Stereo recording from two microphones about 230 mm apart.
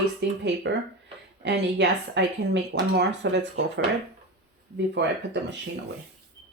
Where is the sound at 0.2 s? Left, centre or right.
Right.